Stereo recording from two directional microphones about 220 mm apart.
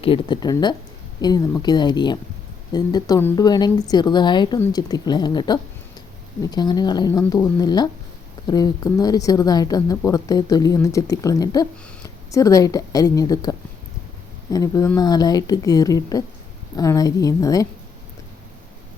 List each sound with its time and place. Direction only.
0.0 s a woman's voice: 20° left (ahead or behind)